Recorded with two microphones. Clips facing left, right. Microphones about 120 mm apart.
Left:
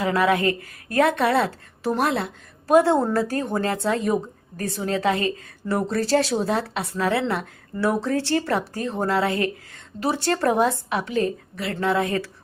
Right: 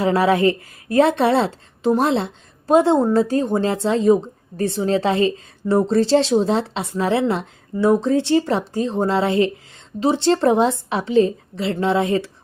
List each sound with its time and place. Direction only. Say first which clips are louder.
0.0 s a woman's voice: right 4 dB; 30° right (ahead or behind)